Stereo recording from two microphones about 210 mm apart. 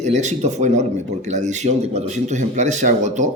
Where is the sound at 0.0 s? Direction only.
35° right (ahead or behind).